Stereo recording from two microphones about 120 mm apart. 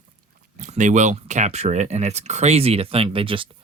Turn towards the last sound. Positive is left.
turn(degrees=-45)  # may be behind; listen again after turning